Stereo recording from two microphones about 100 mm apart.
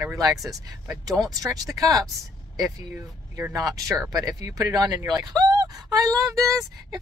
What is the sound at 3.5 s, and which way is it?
Speech, 35° right (ahead or behind).